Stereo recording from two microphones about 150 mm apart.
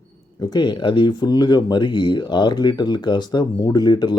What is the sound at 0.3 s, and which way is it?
Speech, 25° left (ahead or behind).